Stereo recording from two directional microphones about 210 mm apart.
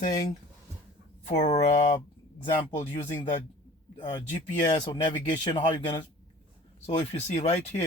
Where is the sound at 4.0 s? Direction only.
20° left (ahead or behind).